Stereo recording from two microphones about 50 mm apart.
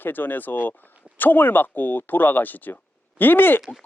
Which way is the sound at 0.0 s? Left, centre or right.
Left.